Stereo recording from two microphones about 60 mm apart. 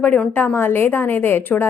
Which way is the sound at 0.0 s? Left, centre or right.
Left.